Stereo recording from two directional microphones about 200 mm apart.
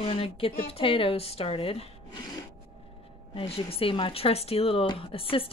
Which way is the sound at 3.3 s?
30° left (ahead or behind).